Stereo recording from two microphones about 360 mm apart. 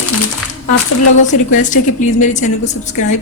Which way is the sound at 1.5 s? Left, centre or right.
Left.